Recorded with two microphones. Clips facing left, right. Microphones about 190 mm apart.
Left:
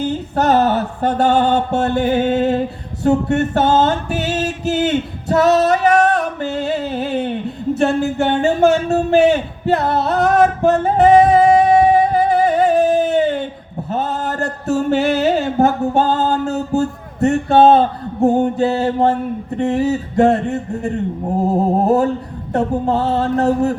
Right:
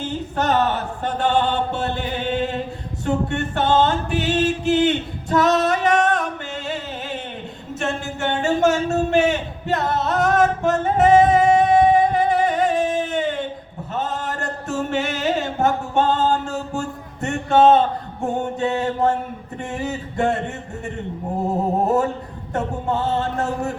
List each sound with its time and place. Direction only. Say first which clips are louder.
0.3 s mantra: left 5 dB; 40° left (ahead or behind)
3.0 s music: left 7 dB; 40° left (ahead or behind)
19.5 s mantra: left 10 dB; 35° left (ahead or behind)
22.5 s mantra: left 6 dB; 35° left (ahead or behind)